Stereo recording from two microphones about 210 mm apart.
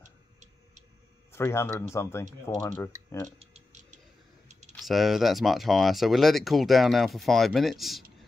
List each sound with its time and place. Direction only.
1.3 s speech: 10° left (ahead or behind)
3.3 s tick-tock: 30° right (ahead or behind)
4.7 s speech: centre (ahead or behind)